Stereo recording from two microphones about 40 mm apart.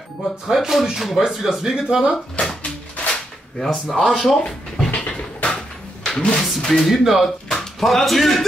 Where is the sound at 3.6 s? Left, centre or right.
Centre.